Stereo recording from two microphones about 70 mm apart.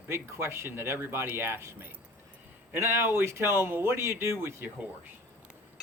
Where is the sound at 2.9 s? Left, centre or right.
Right.